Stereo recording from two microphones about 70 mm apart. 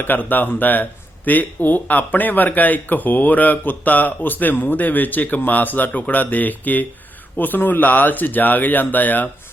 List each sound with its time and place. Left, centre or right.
0.0 s speech: left